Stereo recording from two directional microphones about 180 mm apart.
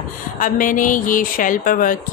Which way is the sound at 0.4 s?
50° left (ahead or behind).